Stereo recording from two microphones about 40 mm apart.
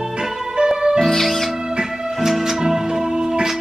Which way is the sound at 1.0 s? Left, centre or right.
Centre.